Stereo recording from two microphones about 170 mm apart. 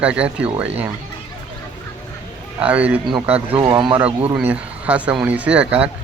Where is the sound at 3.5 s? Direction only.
25° right (ahead or behind).